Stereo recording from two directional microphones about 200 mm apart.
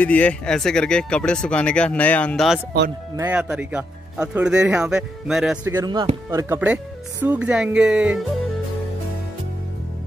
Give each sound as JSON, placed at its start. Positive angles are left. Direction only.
{"t": 0.0, "sound": "speech", "side_deg": 10}
{"t": 5.8, "sound": "speech", "side_deg": -20}
{"t": 6.3, "sound": "speech", "side_deg": -10}